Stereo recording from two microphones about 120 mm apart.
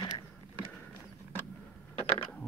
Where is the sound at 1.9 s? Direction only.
50° left (ahead or behind).